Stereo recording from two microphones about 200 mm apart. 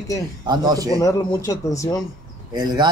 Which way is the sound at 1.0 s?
15° left (ahead or behind).